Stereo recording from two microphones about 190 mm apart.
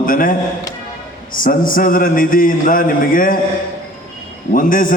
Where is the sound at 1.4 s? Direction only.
45° left (ahead or behind).